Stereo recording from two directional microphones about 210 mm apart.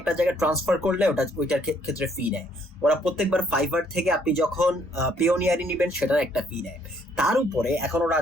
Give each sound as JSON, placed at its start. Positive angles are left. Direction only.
{"t": 0.0, "sound": "speech", "side_deg": -5}